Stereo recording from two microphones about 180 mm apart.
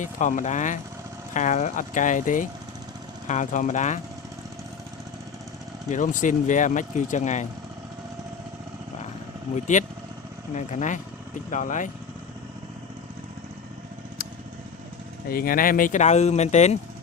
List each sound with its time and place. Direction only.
0.0 s speech: 45° left (ahead or behind)
5.9 s speech: 45° left (ahead or behind)
9.7 s speech: 40° left (ahead or behind)
15.3 s speech: 55° left (ahead or behind)